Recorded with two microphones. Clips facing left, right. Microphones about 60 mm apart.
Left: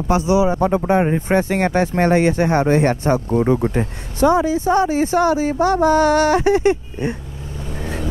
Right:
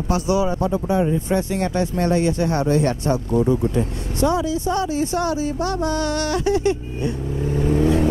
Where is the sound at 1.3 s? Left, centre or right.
Left.